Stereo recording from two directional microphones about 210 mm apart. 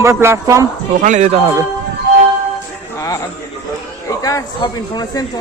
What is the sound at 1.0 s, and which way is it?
Speech, 35° right (ahead or behind).